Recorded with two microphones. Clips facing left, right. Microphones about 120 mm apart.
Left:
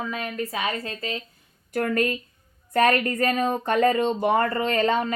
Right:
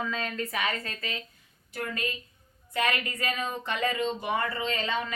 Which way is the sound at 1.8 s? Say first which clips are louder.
Left 10 dB; 50° left (ahead or behind).